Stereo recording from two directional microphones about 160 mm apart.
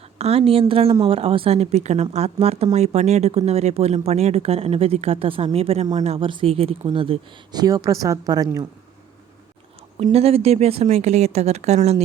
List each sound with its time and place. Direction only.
0.2 s a woman's voice: 40° right (ahead or behind)
10.0 s speech: 40° right (ahead or behind)